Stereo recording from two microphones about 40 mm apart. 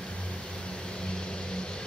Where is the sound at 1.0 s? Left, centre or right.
Centre.